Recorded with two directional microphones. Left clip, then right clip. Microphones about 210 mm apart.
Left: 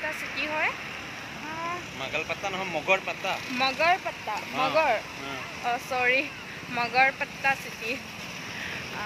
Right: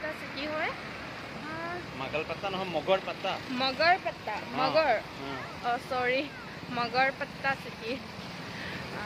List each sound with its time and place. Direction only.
2.1 s speech: 20° right (ahead or behind)
3.5 s speech: centre (ahead or behind)